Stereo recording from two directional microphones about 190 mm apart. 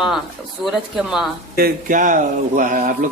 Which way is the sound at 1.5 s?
50° right (ahead or behind).